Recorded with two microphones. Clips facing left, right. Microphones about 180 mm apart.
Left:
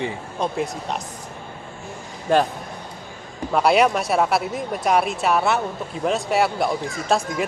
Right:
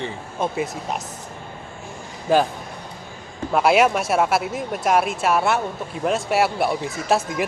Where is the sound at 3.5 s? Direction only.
Centre (ahead or behind).